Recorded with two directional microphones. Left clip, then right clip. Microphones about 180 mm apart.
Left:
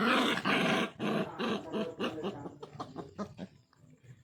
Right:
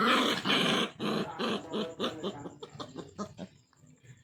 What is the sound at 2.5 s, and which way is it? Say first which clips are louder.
Chicken: even; centre (ahead or behind).